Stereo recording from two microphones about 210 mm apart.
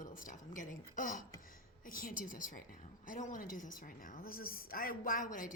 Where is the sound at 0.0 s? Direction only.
40° left (ahead or behind).